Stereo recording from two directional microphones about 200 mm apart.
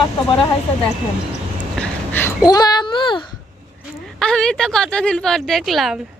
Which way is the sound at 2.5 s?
20° left (ahead or behind).